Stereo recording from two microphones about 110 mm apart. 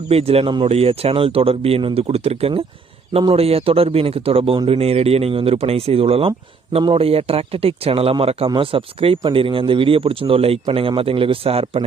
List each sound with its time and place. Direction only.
0.1 s speech: 65° right (ahead or behind)